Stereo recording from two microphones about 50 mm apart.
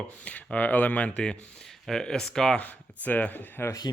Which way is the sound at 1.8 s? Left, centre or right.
Centre.